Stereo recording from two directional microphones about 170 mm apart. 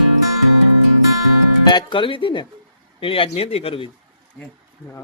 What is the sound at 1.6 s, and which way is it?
Speech, 25° left (ahead or behind).